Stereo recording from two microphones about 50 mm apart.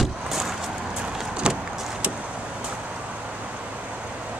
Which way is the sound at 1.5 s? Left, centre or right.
Right.